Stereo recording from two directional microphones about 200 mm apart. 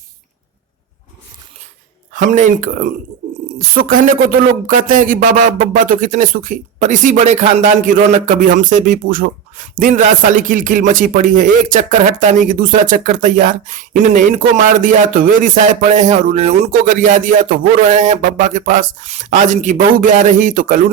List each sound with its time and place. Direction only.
2.1 s speech: 40° right (ahead or behind)